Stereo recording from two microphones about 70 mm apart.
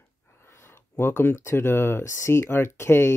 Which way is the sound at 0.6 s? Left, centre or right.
Left.